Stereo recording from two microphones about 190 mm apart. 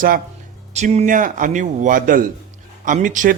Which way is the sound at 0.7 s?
35° right (ahead or behind).